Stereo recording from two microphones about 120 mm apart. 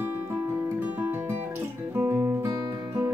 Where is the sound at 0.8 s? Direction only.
20° right (ahead or behind).